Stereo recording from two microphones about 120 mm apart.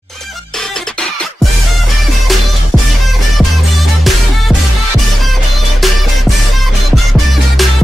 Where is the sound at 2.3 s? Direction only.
Centre (ahead or behind).